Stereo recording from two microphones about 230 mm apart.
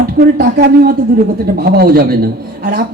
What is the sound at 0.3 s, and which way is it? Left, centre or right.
Speech, right.